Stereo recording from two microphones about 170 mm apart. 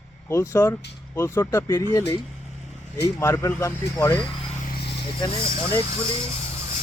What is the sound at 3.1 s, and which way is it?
Speech, 15° left (ahead or behind).